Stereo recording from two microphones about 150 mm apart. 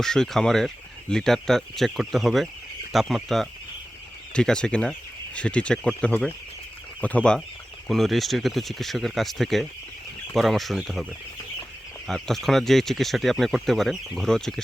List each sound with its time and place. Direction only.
0.0 s speech: 5° left (ahead or behind)
12.0 s speech: centre (ahead or behind)